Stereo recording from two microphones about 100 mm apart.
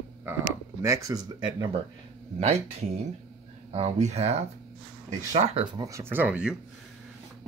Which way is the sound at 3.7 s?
90° right.